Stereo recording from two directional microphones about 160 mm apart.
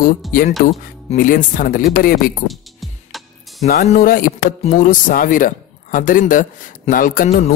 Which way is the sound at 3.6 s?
65° left (ahead or behind).